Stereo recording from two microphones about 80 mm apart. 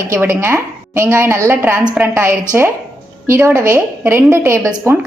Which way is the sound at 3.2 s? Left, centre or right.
Right.